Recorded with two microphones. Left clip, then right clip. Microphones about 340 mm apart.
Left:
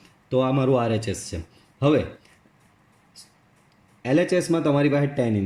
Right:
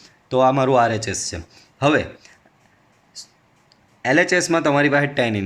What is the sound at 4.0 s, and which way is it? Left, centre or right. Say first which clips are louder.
A man's voice: right 5 dB; right.